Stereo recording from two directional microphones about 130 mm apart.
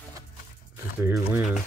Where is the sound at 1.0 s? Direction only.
15° right (ahead or behind).